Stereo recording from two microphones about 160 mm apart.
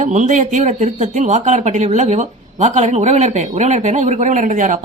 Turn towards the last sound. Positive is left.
turn(degrees=-50)  # may be behind; listen again after turning